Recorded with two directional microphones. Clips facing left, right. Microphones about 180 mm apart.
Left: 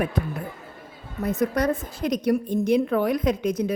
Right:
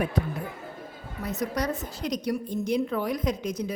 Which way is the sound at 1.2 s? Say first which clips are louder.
Left 6 dB; 50° left (ahead or behind).